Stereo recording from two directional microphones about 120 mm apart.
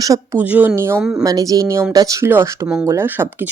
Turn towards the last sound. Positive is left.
turn(degrees=-15)  # may be behind; listen again after turning